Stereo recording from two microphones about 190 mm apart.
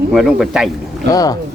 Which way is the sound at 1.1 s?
20° left (ahead or behind).